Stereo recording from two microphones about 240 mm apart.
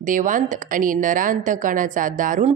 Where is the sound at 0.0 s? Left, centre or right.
Right.